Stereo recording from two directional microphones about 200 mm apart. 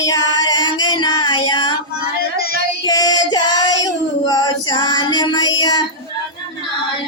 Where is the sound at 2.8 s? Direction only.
20° left (ahead or behind).